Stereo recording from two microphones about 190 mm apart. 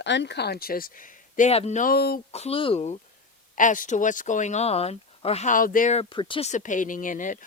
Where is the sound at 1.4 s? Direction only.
35° left (ahead or behind); by 2.2 s 55° left (ahead or behind).